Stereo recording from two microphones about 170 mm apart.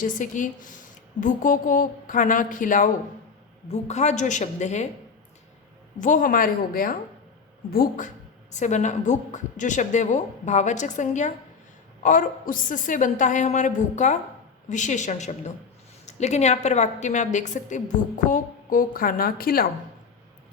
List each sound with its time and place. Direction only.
0.0 s a woman's voice: 50° left (ahead or behind)
6.0 s a woman's voice: 50° left (ahead or behind)